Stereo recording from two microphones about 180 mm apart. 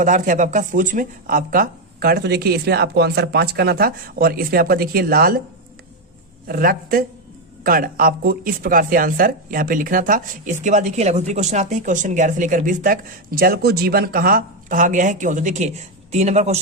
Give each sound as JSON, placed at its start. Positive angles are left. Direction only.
{"t": 0.0, "sound": "speech", "side_deg": -45}
{"t": 6.5, "sound": "speech", "side_deg": -55}